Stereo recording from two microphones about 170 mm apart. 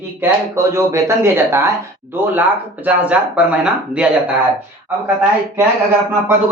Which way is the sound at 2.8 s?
10° right (ahead or behind).